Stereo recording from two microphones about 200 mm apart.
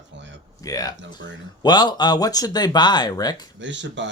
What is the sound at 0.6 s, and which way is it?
Speech, 20° left (ahead or behind).